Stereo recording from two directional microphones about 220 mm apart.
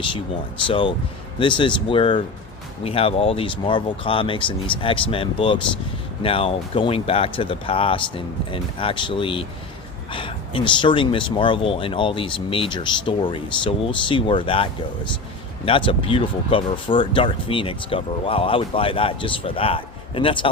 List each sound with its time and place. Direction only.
0.7 s speech: 25° left (ahead or behind)